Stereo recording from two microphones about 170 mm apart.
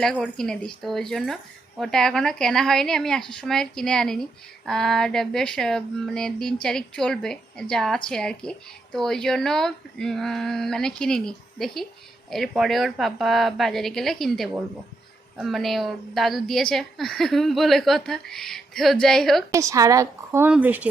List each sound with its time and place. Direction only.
0.0 s a woman's voice: 5° left (ahead or behind)
19.5 s speech: 20° right (ahead or behind)